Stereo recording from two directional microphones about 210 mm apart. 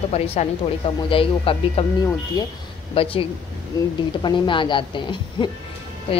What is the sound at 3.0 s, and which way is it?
Speech, 25° left (ahead or behind).